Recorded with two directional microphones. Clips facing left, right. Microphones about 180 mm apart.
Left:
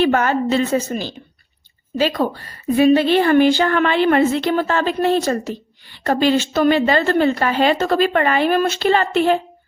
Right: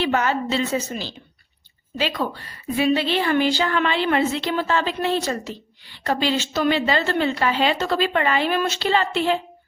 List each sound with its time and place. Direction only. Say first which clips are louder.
0.0 s a woman's voice: left 5 dB; 50° left (ahead or behind)